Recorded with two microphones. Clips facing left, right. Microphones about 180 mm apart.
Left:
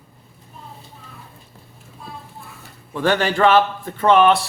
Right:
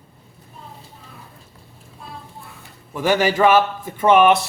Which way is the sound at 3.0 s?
10° right (ahead or behind).